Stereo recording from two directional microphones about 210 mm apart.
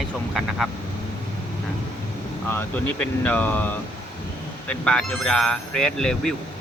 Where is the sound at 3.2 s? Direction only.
5° left (ahead or behind).